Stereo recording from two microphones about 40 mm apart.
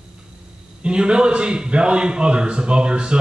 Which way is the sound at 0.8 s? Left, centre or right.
Right.